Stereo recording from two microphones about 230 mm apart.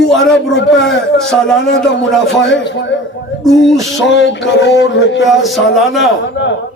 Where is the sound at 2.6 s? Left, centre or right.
Left.